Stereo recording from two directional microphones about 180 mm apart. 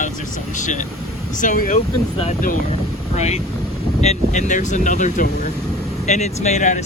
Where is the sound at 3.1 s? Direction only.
40° left (ahead or behind).